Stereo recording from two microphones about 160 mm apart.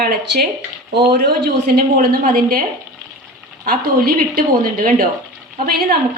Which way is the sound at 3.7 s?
65° right (ahead or behind).